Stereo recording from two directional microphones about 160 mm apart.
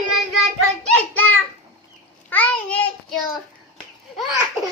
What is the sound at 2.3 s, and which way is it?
Child singing, 10° left (ahead or behind).